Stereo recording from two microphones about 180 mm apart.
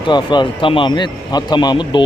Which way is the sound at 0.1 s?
25° left (ahead or behind).